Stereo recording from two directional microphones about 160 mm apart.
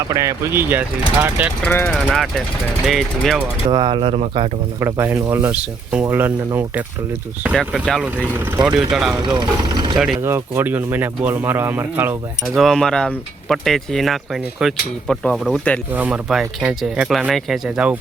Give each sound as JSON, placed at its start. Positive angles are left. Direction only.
{"t": 0.1, "sound": "speech", "side_deg": -20}
{"t": 1.6, "sound": "speech", "side_deg": 10}
{"t": 2.0, "sound": "speech", "side_deg": 0}
{"t": 3.7, "sound": "speech", "side_deg": -30}
{"t": 4.8, "sound": "speech", "side_deg": -15}
{"t": 8.1, "sound": "speech", "side_deg": -10}
{"t": 8.9, "sound": "speech", "side_deg": 0}
{"t": 9.2, "sound": "speech", "side_deg": -25}
{"t": 10.2, "sound": "speech", "side_deg": -15}
{"t": 12.5, "sound": "speech", "side_deg": 0}
{"t": 15.9, "sound": "speech", "side_deg": -10}